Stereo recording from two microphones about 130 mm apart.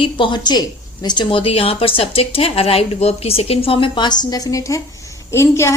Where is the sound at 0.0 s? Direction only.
35° left (ahead or behind).